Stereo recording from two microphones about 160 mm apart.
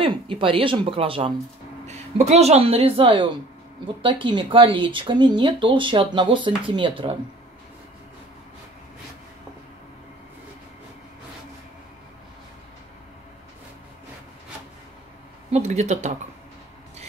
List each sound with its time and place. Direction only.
0.0 s speech: 35° right (ahead or behind)
15.5 s speech: 45° right (ahead or behind)